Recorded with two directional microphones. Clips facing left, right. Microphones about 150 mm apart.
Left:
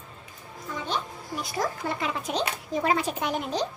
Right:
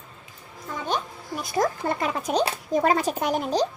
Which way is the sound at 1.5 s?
45° right (ahead or behind).